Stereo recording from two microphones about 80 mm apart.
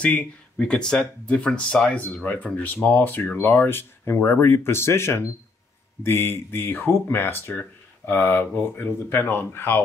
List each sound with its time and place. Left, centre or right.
0.0 s speech: centre